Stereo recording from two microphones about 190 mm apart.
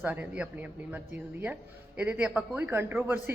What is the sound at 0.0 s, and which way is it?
Speech, 10° right (ahead or behind).